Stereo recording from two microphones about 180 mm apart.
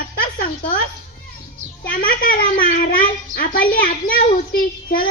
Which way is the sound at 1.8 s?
55° left (ahead or behind).